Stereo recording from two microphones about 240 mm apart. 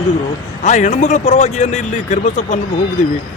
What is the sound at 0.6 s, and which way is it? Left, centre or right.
Speech, left.